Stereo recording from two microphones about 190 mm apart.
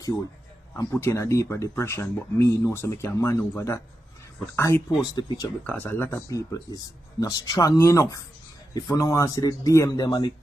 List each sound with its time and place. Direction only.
0.7 s speech: 15° left (ahead or behind)